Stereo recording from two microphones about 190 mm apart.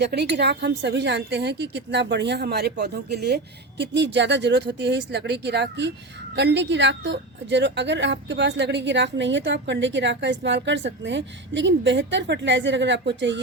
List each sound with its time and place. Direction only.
0.0 s a woman's voice: 60° right (ahead or behind)